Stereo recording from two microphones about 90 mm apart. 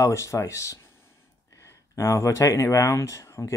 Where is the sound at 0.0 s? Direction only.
35° left (ahead or behind).